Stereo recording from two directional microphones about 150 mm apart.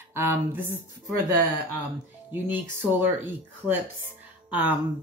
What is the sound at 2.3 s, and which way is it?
Speech, 15° right (ahead or behind).